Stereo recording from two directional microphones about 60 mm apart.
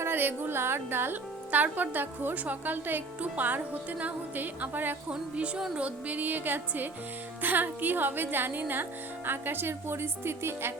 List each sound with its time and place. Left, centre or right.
0.0 s speech: right
1.5 s a woman's voice: right
5.1 s a woman's voice: centre; by 10.8 s right